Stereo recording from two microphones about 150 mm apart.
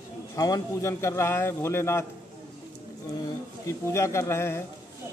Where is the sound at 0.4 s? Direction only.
20° left (ahead or behind).